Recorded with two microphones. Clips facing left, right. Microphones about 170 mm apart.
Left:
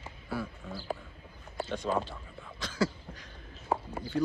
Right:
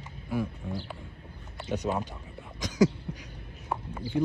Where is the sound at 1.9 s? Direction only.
10° right (ahead or behind).